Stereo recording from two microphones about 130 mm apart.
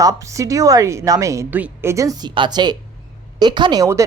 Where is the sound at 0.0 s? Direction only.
25° right (ahead or behind).